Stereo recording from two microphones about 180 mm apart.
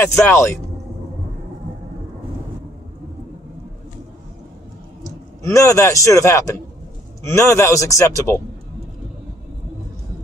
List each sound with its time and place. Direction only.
0.0 s a man's voice: 15° left (ahead or behind)
5.0 s a man's voice: 15° left (ahead or behind)